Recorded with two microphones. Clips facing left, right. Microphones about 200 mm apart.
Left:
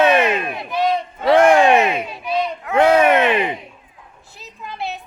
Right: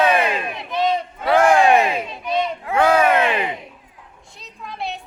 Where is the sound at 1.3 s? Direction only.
20° left (ahead or behind).